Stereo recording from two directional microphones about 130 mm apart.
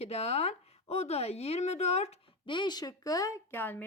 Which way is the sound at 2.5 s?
35° left (ahead or behind).